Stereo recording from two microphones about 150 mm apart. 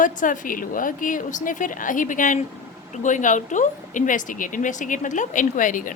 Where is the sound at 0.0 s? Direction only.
60° left (ahead or behind).